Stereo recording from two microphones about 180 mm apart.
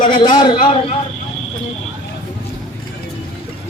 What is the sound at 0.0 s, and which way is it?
Speech, 25° left (ahead or behind).